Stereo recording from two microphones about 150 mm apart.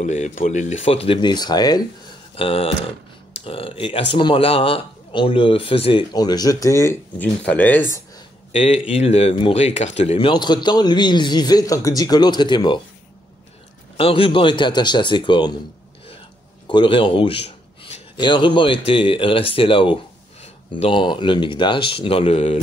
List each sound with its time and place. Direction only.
0.0 s speech: 55° left (ahead or behind)
0.8 s speech: 40° left (ahead or behind)
2.3 s speech: 40° left (ahead or behind); by 8.0 s 15° left (ahead or behind)
8.5 s speech: 45° left (ahead or behind); by 12.8 s 30° left (ahead or behind)
13.9 s speech: 40° left (ahead or behind)
16.6 s a man's voice: 35° left (ahead or behind)